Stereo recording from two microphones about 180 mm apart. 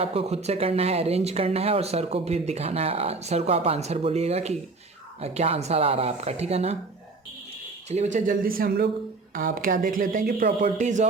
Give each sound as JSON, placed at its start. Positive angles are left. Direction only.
{"t": 0.0, "sound": "speech", "side_deg": -35}
{"t": 7.9, "sound": "speech", "side_deg": -40}